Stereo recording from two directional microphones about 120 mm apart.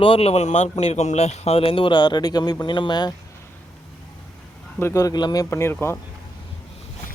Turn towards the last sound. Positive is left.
turn(degrees=20)  # may be behind; listen again after turning